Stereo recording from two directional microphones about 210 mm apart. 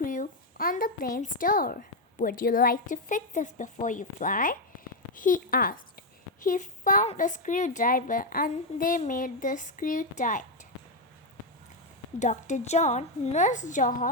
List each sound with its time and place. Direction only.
0.0 s a child's voice: 40° left (ahead or behind)
12.2 s a child's voice: 35° left (ahead or behind)